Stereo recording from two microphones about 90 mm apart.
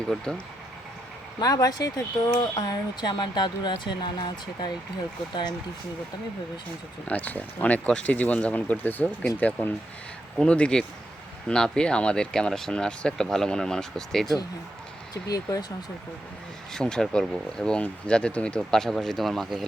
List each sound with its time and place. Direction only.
0.1 s speech: 5° left (ahead or behind)
1.4 s speech: 45° left (ahead or behind)
7.1 s speech: 20° left (ahead or behind)
16.7 s speech: 5° left (ahead or behind)